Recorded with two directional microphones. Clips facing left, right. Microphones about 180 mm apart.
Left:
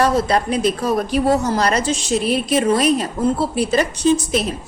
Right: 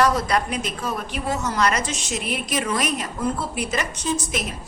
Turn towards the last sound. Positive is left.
turn(degrees=30)  # may be behind; listen again after turning